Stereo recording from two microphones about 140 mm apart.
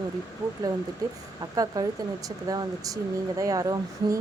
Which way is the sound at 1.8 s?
25° right (ahead or behind).